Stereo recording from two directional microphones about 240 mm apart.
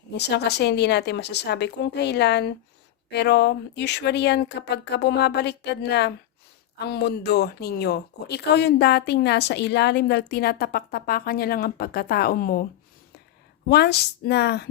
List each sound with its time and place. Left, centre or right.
0.2 s speech: left
13.7 s speech: left